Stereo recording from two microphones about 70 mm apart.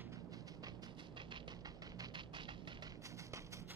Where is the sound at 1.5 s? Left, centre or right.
Right.